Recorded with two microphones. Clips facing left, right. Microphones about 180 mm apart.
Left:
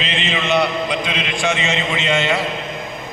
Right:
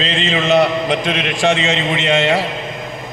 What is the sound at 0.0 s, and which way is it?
A man's voice, 40° right (ahead or behind).